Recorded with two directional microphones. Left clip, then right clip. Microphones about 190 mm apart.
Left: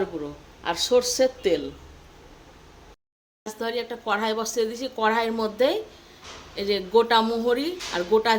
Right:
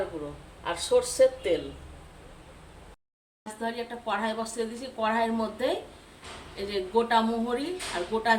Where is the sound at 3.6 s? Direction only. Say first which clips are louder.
Left 4 dB; 60° left (ahead or behind).